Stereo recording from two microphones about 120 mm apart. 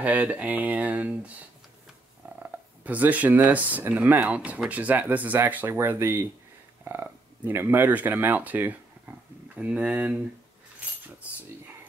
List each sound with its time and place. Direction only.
0.0 s speech: 10° right (ahead or behind)
2.3 s speech: 10° right (ahead or behind)